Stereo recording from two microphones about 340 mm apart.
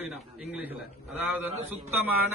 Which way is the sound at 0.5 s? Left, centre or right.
Centre.